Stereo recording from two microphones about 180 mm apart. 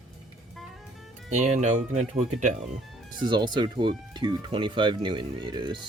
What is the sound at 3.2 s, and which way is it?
Speech, 25° right (ahead or behind).